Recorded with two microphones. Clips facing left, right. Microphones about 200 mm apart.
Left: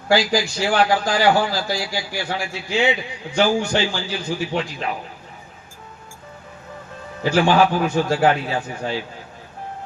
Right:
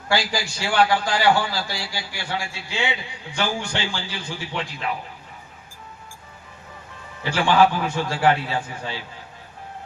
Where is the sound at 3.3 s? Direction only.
40° left (ahead or behind).